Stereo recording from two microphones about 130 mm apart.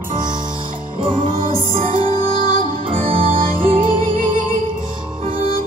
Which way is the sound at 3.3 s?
90° right.